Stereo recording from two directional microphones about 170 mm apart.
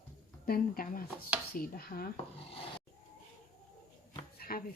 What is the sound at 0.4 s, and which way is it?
Speech, 60° left (ahead or behind).